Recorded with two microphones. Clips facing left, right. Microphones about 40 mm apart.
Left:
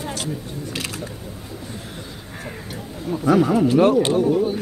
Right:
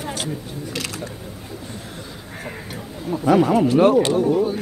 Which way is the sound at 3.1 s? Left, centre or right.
Centre.